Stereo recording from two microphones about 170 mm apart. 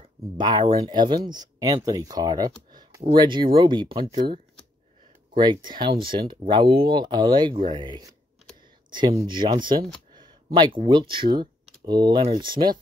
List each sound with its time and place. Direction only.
0.0 s speech: 25° right (ahead or behind)
5.3 s speech: 25° right (ahead or behind)
10.1 s a sound: 25° right (ahead or behind)
10.9 s speech: 25° right (ahead or behind)
11.3 s typing: 25° right (ahead or behind)
12.3 s speech: 25° right (ahead or behind)